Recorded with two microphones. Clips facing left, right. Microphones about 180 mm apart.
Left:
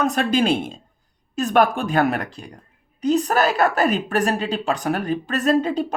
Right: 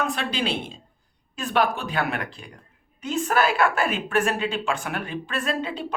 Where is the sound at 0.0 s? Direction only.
45° left (ahead or behind).